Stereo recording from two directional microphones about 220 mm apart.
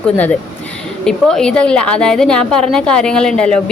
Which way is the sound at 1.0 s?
5° left (ahead or behind).